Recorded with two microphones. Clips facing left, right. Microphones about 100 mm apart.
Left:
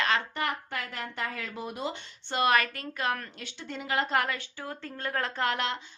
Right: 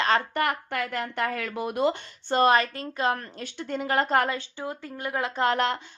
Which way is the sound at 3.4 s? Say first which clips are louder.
Right 8 dB; 50° right (ahead or behind).